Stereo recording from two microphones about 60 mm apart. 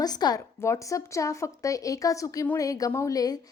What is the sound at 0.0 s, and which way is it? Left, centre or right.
Speech, left.